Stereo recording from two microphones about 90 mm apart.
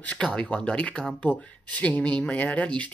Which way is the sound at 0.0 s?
10° left (ahead or behind).